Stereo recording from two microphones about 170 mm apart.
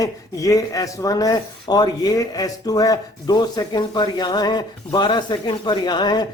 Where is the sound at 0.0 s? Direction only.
20° left (ahead or behind).